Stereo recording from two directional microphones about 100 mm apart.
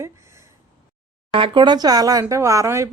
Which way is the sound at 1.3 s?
55° right (ahead or behind).